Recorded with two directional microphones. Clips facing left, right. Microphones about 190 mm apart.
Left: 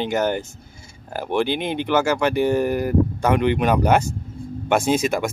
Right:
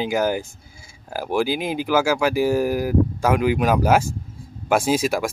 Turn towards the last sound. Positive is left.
turn(degrees=-5)  # may be behind; listen again after turning